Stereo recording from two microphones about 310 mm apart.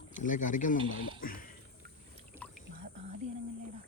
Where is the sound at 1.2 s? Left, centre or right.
Left.